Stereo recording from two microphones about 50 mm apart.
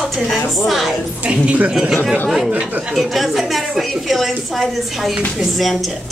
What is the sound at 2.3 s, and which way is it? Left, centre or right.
A woman's voice, centre.